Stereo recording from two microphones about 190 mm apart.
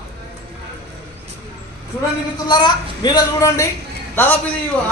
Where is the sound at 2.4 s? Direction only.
25° left (ahead or behind).